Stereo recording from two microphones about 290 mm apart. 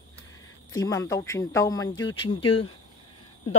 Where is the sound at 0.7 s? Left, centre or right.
Centre.